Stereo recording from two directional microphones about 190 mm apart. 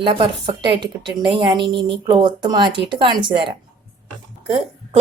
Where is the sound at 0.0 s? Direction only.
25° right (ahead or behind).